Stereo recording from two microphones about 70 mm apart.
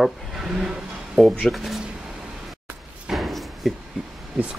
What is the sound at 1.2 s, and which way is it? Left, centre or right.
Speech, centre.